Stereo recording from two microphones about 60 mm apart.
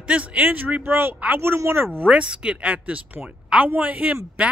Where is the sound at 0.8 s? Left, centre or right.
Right.